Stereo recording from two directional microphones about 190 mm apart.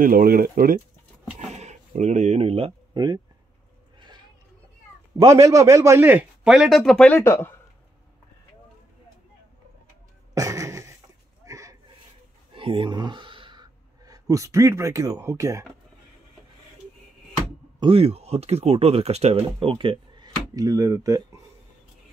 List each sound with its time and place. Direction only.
0.0 s speech: 50° right (ahead or behind)
1.5 s speech: 35° right (ahead or behind); by 3.2 s 20° right (ahead or behind)
5.2 s a man's voice: 15° right (ahead or behind); by 7.5 s 10° left (ahead or behind)
10.3 s a sound: 15° right (ahead or behind)
12.5 s speech: 25° right (ahead or behind)
17.7 s speech: 30° right (ahead or behind)